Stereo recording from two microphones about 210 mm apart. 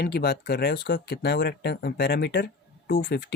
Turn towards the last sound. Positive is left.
turn(degrees=50)  # may be behind; listen again after turning